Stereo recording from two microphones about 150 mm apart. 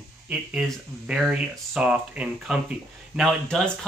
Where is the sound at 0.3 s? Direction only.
5° right (ahead or behind).